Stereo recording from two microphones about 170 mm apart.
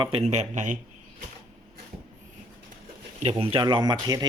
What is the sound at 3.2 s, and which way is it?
A man's voice, 35° right (ahead or behind).